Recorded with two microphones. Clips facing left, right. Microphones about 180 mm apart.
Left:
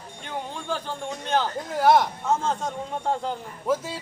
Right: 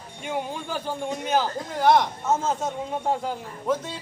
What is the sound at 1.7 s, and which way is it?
Speech, 5° left (ahead or behind).